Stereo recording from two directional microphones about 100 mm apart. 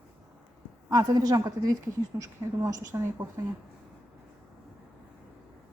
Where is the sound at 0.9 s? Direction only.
40° right (ahead or behind).